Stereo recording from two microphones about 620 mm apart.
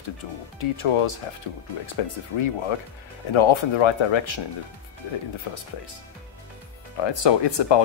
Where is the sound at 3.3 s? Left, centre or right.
Left.